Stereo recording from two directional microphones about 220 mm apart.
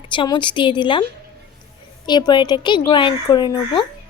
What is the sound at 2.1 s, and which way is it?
A woman's voice, 20° left (ahead or behind).